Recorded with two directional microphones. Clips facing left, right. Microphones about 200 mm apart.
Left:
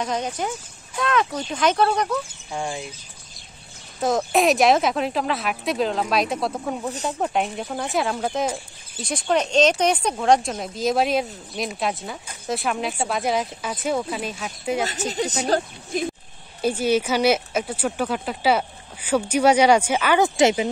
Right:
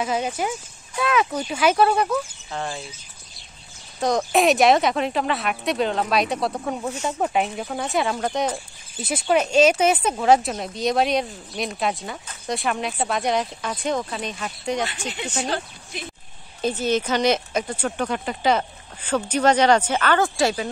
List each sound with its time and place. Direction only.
0.0 s speech: 5° right (ahead or behind)
2.5 s speech: 15° left (ahead or behind)
4.0 s speech: centre (ahead or behind)
15.0 s a woman's voice: 40° left (ahead or behind)
16.6 s speech: 10° left (ahead or behind)